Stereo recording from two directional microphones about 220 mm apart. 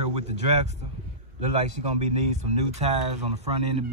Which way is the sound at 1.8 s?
30° right (ahead or behind).